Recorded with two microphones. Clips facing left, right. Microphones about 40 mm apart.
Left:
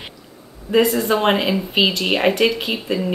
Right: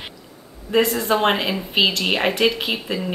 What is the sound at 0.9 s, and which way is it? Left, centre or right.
Speech, centre.